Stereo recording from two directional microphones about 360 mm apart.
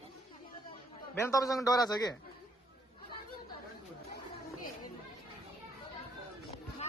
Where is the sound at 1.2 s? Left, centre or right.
Centre.